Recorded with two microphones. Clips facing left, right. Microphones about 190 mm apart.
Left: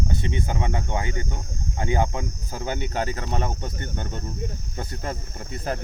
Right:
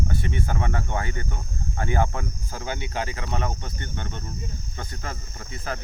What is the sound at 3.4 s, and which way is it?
Cricket, 40° left (ahead or behind).